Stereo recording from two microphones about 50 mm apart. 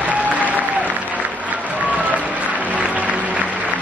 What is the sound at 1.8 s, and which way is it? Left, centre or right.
Music, right.